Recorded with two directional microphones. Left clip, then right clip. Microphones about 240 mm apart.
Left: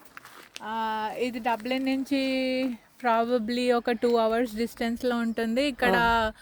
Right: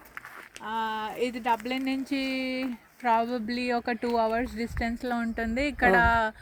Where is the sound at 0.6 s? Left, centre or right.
Left.